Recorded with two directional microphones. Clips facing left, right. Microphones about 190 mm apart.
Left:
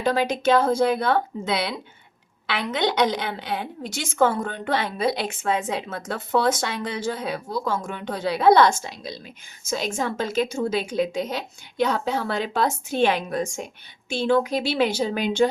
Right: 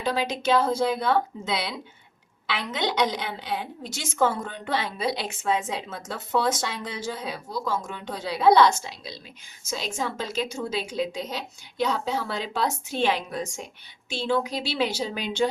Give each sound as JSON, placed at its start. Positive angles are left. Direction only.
{"t": 0.0, "sound": "a woman's voice", "side_deg": 50}